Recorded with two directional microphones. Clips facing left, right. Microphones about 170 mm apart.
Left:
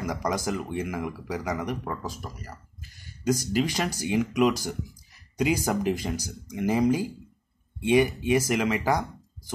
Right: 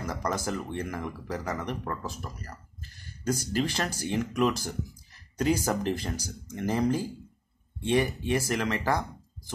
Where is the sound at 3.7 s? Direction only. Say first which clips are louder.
Left 3 dB; 10° left (ahead or behind).